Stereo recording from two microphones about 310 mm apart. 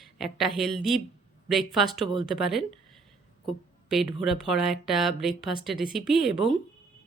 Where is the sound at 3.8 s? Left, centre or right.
Centre.